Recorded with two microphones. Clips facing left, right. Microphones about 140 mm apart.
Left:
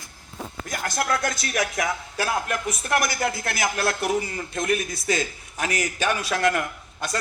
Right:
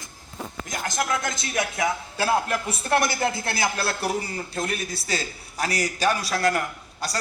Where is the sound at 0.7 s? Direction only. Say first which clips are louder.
Left 1 dB; 20° right (ahead or behind).